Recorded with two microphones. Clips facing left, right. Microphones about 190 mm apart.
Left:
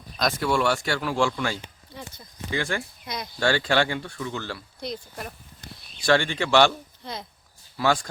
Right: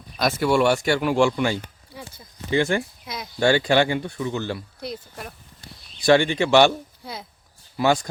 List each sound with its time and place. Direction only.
0.2 s speech: 5° right (ahead or behind)
0.6 s speech: 20° right (ahead or behind)
1.9 s a sound: 10° right (ahead or behind)
2.5 s speech: 20° right (ahead or behind)
3.1 s a sound: 5° right (ahead or behind)
3.4 s speech: 15° right (ahead or behind)
4.8 s speech: 5° right (ahead or behind)
6.1 s speech: 15° right (ahead or behind)